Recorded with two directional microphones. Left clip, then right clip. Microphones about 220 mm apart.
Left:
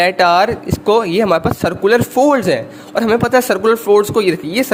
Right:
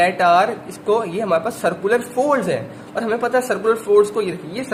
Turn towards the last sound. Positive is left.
turn(degrees=50)  # may be behind; listen again after turning